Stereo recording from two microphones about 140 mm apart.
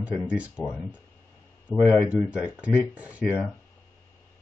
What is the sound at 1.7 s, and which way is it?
Speech, 5° right (ahead or behind).